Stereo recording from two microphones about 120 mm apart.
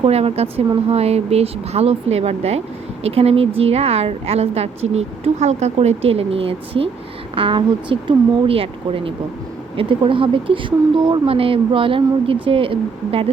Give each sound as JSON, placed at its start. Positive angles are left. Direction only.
{"t": 0.0, "sound": "a woman's voice", "side_deg": -55}